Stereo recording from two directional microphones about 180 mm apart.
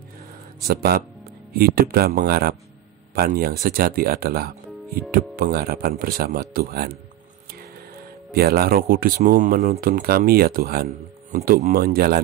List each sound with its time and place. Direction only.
0.7 s speech: 60° right (ahead or behind)
7.9 s speech: 55° right (ahead or behind)